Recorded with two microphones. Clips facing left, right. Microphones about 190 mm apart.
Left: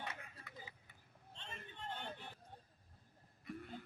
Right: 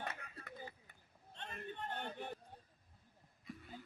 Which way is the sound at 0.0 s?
50° right (ahead or behind).